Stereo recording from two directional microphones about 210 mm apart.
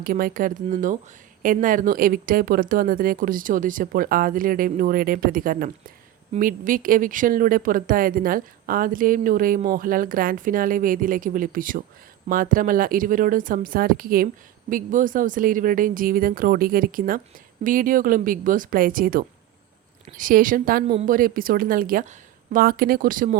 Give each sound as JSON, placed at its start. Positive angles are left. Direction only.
{"t": 0.0, "sound": "a woman's voice", "side_deg": -45}